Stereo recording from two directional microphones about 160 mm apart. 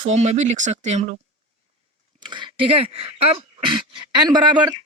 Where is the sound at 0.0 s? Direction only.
45° right (ahead or behind).